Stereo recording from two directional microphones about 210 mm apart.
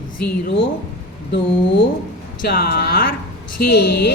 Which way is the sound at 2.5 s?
50° left (ahead or behind).